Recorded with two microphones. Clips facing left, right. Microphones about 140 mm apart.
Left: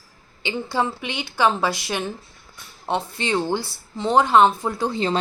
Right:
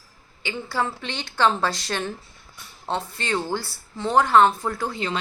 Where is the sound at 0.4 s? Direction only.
20° left (ahead or behind).